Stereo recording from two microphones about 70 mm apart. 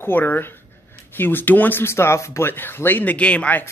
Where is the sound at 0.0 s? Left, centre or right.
Left.